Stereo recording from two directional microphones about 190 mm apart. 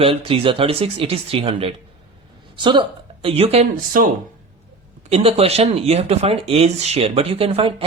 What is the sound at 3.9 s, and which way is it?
Speech, 45° right (ahead or behind).